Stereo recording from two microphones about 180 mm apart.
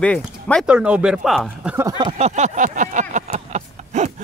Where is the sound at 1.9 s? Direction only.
25° right (ahead or behind).